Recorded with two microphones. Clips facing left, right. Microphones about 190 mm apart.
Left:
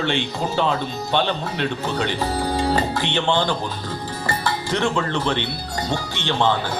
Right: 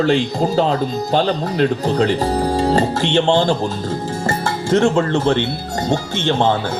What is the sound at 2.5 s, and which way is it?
Music, 45° right (ahead or behind).